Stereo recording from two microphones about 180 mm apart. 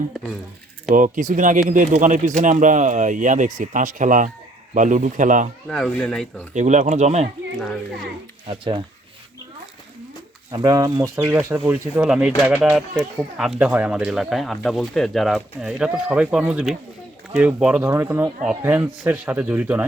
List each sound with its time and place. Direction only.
0.9 s speech: 45° right (ahead or behind)
5.6 s speech: 5° left (ahead or behind)
6.5 s speech: 40° right (ahead or behind)
8.4 s speech: 30° right (ahead or behind)
10.5 s speech: 20° right (ahead or behind)